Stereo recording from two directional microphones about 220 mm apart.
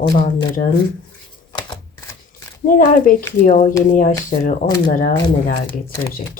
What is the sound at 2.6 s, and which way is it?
Speech, 40° left (ahead or behind).